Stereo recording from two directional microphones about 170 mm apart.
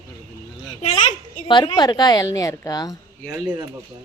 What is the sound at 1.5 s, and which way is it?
Speech, 30° left (ahead or behind).